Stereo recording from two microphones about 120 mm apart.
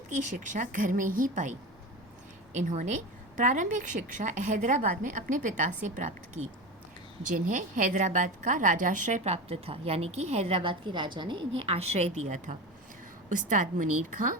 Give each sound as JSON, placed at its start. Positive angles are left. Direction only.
{"t": 0.1, "sound": "a woman's voice", "side_deg": -90}
{"t": 6.4, "sound": "speech", "side_deg": -70}
{"t": 7.3, "sound": "a woman's voice", "side_deg": -90}
{"t": 13.3, "sound": "a woman's voice", "side_deg": -90}